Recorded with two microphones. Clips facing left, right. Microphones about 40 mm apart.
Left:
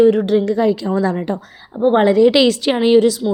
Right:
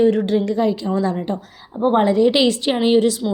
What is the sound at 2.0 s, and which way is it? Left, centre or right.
Speech, left.